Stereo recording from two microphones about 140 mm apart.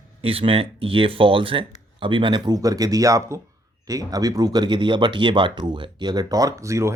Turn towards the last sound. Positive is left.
turn(degrees=-20)  # may be behind; listen again after turning